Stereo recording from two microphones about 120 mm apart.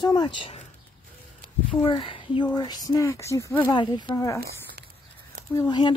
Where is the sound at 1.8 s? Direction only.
45° left (ahead or behind).